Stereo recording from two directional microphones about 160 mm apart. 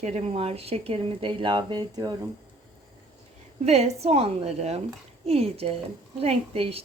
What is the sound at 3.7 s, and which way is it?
Speech, 40° right (ahead or behind).